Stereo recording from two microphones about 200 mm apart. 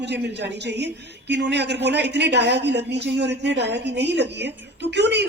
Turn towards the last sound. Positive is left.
turn(degrees=-55)  # may be behind; listen again after turning